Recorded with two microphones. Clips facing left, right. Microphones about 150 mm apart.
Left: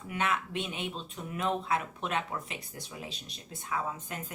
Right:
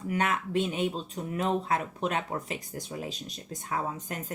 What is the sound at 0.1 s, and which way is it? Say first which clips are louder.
Speech: right 4 dB; 40° right (ahead or behind).